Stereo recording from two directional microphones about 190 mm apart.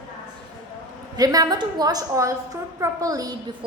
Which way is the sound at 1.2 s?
20° right (ahead or behind).